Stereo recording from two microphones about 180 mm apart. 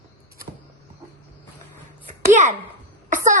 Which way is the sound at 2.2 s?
45° right (ahead or behind).